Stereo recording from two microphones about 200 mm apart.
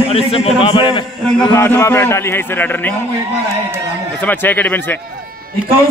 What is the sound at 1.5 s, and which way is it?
A man's voice, 10° left (ahead or behind).